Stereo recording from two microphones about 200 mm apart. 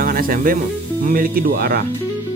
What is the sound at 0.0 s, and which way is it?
Speech, 45° right (ahead or behind).